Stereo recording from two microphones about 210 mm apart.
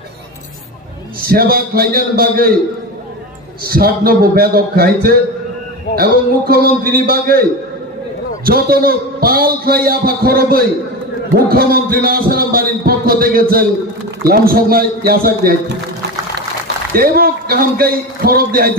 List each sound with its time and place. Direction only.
1.2 s a man's voice: 45° right (ahead or behind)
3.6 s a man's voice: 45° right (ahead or behind)
8.5 s a man's voice: 45° right (ahead or behind)
16.9 s a man's voice: 45° right (ahead or behind)